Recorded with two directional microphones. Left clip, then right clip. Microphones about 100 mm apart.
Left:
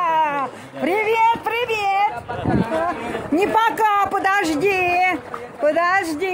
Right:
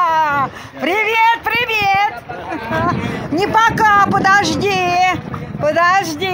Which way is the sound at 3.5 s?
25° left (ahead or behind).